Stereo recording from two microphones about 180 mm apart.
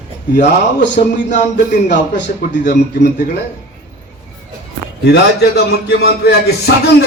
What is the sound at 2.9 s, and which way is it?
Music, 65° left (ahead or behind).